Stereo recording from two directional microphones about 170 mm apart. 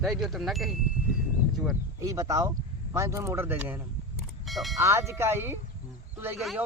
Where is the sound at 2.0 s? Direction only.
20° right (ahead or behind).